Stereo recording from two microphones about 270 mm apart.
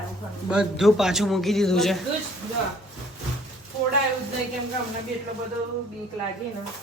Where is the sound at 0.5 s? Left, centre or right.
Centre.